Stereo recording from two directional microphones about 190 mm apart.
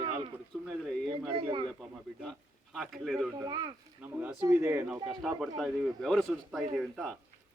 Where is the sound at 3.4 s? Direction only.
20° right (ahead or behind).